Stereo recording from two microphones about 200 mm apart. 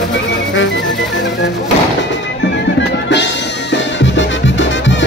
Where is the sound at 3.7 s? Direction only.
65° left (ahead or behind).